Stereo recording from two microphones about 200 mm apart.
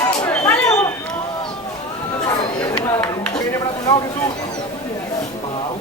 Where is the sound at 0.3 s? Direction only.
10° left (ahead or behind).